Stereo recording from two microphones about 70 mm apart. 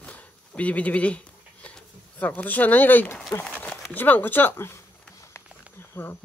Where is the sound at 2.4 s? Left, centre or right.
Left.